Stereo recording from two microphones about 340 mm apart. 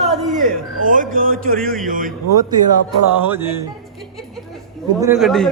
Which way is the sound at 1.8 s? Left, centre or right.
Right.